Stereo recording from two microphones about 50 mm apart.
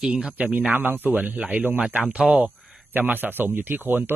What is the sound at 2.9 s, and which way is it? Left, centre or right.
Speech, right.